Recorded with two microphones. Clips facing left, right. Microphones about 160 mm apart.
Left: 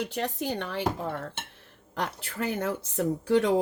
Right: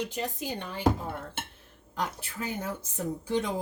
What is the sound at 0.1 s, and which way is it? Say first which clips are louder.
Speech: left 3 dB; 75° left (ahead or behind).